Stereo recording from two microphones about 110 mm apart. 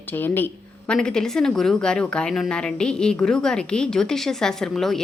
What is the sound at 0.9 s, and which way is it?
A woman's voice, 5° left (ahead or behind).